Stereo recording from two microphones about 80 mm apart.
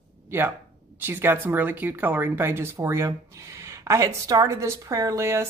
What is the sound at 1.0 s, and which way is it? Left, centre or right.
A woman's voice, right.